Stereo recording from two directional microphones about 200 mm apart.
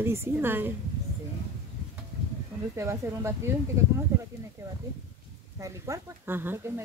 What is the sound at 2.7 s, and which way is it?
Speech, 15° right (ahead or behind).